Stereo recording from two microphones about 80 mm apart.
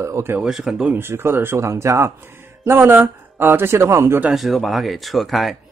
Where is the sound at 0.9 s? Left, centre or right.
Right.